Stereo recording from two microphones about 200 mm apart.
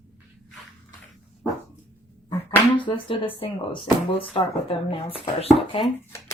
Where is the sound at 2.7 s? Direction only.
25° left (ahead or behind).